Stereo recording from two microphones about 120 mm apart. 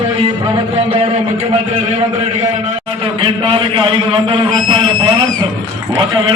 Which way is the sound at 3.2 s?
45° right (ahead or behind).